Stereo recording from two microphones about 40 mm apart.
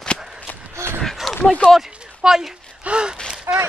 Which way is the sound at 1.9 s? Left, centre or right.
Right.